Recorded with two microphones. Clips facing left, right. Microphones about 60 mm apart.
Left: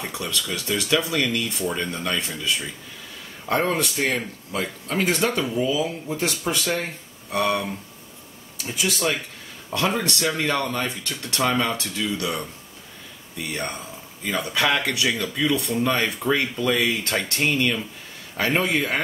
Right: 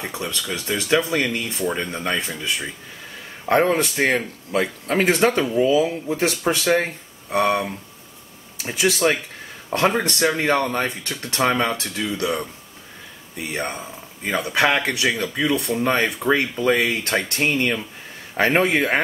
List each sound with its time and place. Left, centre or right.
0.0 s speech: right
3.7 s speech: right
7.2 s speech: right
8.6 s speech: right
9.7 s speech: right